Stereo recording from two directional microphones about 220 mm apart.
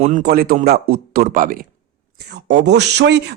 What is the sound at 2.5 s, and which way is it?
Speech, 50° right (ahead or behind).